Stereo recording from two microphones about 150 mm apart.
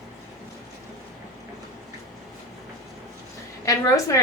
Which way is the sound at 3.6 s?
20° left (ahead or behind).